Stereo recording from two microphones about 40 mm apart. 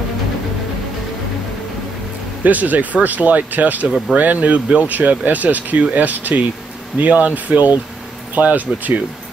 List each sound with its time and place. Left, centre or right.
2.4 s speech: right